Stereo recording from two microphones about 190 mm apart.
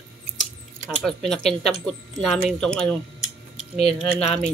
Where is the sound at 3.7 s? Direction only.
35° left (ahead or behind).